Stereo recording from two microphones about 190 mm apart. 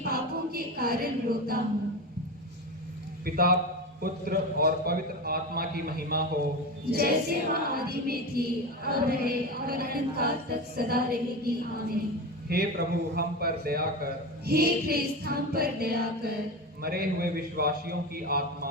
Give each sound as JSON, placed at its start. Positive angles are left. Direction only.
{"t": 0.0, "sound": "choir", "side_deg": -55}
{"t": 3.2, "sound": "a man's voice", "side_deg": -50}